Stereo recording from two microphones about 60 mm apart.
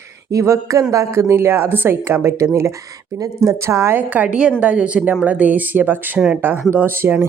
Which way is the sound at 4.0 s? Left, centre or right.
Right.